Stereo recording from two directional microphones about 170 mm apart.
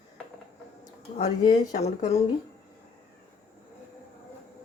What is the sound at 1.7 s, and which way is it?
Speech, 40° left (ahead or behind).